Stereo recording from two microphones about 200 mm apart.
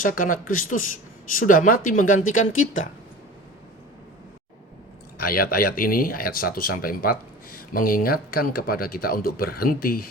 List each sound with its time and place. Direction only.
0.0 s speech: 45° left (ahead or behind)
2.4 s speech: 85° left
5.2 s speech: 50° left (ahead or behind)